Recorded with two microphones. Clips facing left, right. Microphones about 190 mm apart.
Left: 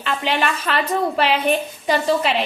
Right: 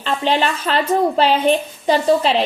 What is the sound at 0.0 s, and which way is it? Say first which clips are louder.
A woman's voice: right 3 dB; 30° right (ahead or behind).